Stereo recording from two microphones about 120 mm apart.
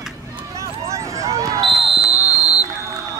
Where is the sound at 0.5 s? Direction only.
25° right (ahead or behind).